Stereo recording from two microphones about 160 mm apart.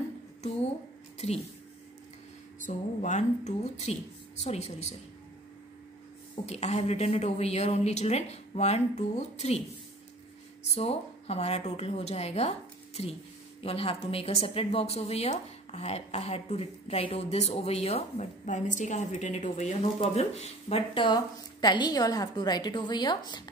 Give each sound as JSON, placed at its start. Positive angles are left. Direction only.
{"t": 1.1, "sound": "a sound", "side_deg": 40}
{"t": 2.6, "sound": "a woman's voice", "side_deg": 50}
{"t": 6.4, "sound": "a woman's voice", "side_deg": 40}
{"t": 10.6, "sound": "speech", "side_deg": 40}